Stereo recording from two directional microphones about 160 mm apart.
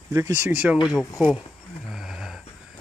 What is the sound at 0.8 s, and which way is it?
Speech, centre (ahead or behind).